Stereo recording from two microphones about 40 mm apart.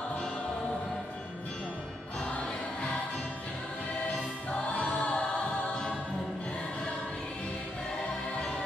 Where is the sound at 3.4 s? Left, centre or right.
Left.